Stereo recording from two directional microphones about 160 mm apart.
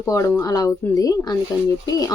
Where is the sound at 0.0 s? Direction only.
20° left (ahead or behind).